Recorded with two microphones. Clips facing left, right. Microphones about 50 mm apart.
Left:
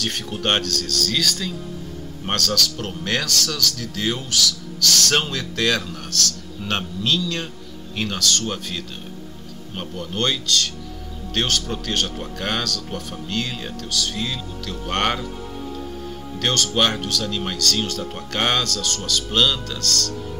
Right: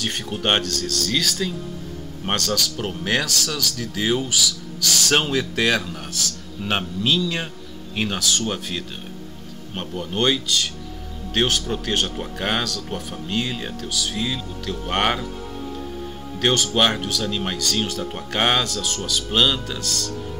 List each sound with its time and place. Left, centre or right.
0.0 s speech: centre
9.8 s speech: centre